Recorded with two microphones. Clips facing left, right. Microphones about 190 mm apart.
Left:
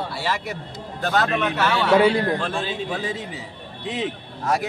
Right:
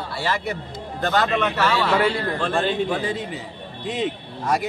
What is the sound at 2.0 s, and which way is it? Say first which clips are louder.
Speech: left 4 dB; 15° left (ahead or behind).